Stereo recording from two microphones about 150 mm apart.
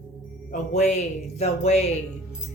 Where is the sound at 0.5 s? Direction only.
50° left (ahead or behind).